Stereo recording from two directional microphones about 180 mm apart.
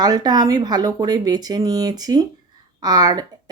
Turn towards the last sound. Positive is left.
turn(degrees=-20)  # may be behind; listen again after turning